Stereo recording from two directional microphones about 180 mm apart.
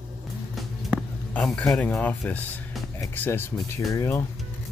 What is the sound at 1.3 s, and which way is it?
Speech, 5° left (ahead or behind).